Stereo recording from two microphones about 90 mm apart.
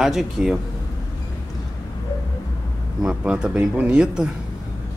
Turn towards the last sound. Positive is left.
turn(degrees=-10)  # may be behind; listen again after turning